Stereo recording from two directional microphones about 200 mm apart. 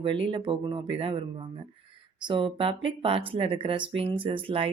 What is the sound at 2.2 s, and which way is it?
Speech, 25° right (ahead or behind).